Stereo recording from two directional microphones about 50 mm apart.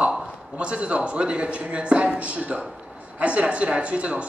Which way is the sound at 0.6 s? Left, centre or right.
Right.